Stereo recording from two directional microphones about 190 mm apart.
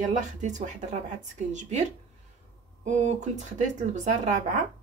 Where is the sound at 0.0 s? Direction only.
40° right (ahead or behind).